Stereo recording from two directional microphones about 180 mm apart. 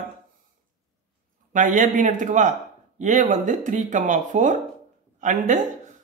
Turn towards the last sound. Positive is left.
turn(degrees=-45)  # may be behind; listen again after turning